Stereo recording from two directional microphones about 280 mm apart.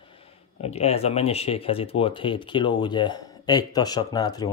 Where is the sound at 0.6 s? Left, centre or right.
Left.